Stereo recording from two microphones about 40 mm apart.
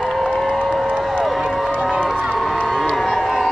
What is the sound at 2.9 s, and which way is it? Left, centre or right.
Crowd, centre.